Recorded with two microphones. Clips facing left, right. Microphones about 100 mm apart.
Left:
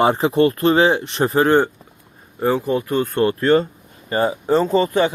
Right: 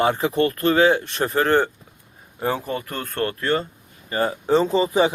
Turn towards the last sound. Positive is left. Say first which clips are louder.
# left 2 dB
turn(degrees=0)  # may be behind; listen again after turning